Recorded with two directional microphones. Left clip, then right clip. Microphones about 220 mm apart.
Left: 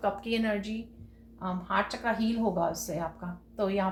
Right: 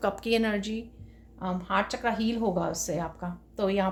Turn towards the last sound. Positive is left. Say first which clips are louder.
# right 2 dB
turn(degrees=-50)  # may be behind; listen again after turning